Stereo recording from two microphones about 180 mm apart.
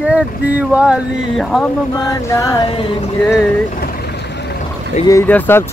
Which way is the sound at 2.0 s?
20° left (ahead or behind).